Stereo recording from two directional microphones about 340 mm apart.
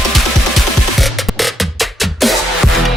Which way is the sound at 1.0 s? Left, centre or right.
Centre.